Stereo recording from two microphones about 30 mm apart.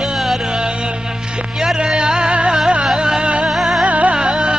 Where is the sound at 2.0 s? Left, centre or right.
Right.